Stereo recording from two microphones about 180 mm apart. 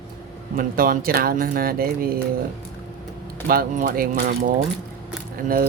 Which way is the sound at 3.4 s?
50° right (ahead or behind).